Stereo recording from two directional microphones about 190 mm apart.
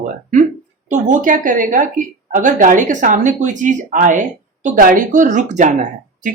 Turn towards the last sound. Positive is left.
turn(degrees=-40)  # may be behind; listen again after turning